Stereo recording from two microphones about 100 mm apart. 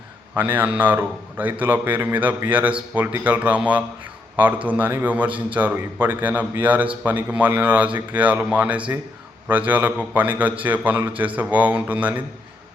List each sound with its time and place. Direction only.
0.3 s a man's voice: 20° right (ahead or behind)